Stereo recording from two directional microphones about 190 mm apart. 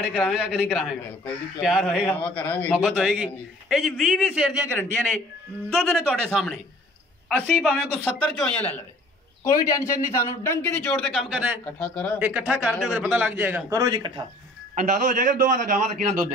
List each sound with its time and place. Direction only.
0.1 s a man's voice: centre (ahead or behind)
2.7 s a man's voice: 5° right (ahead or behind)
5.7 s a man's voice: 5° left (ahead or behind)
11.6 s a man's voice: 10° left (ahead or behind)
12.2 s a man's voice: 10° right (ahead or behind)
14.8 s a man's voice: 45° right (ahead or behind)